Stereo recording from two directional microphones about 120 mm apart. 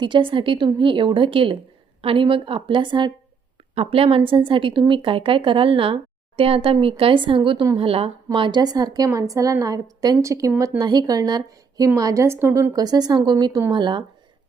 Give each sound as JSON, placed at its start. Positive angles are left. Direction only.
{"t": 0.0, "sound": "a woman's voice", "side_deg": -45}
{"t": 3.8, "sound": "a woman's voice", "side_deg": -55}
{"t": 7.8, "sound": "a woman's voice", "side_deg": -50}
{"t": 12.7, "sound": "a woman's voice", "side_deg": -35}